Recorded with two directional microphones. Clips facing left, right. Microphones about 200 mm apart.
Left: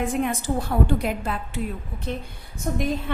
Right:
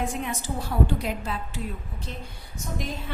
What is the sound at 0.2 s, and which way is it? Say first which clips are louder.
A woman's voice: left 7 dB; 55° left (ahead or behind).